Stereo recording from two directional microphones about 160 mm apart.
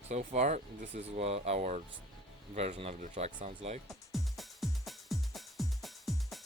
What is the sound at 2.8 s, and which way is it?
Speech, 45° right (ahead or behind).